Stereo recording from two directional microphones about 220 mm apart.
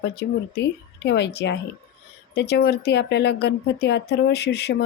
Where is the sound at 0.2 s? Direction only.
50° left (ahead or behind).